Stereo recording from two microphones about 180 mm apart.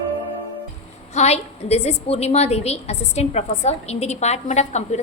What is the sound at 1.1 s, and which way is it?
A woman's voice, 35° left (ahead or behind).